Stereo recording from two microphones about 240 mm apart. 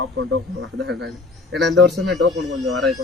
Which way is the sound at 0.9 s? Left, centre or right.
Right.